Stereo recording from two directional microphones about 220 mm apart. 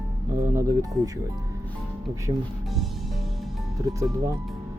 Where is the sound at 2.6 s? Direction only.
Centre (ahead or behind).